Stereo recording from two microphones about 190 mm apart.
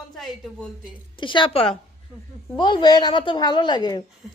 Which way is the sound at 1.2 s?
25° left (ahead or behind).